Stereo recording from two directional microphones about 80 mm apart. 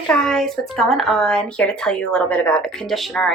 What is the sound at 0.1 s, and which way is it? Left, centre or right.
A woman's voice, centre.